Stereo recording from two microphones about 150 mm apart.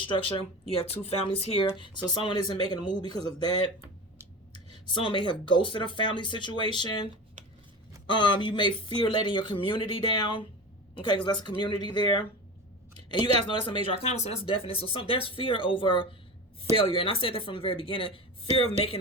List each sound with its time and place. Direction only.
0.0 s speech: 35° left (ahead or behind)
4.7 s speech: 35° left (ahead or behind)
8.1 s speech: 30° left (ahead or behind)
13.5 s speech: 35° left (ahead or behind)